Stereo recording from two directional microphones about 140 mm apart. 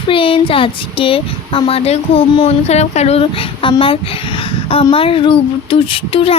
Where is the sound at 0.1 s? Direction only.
40° left (ahead or behind).